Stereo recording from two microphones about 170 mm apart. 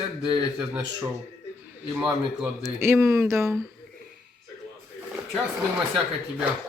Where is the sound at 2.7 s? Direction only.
15° right (ahead or behind).